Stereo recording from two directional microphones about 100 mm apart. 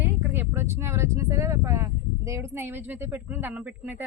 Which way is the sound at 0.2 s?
25° right (ahead or behind).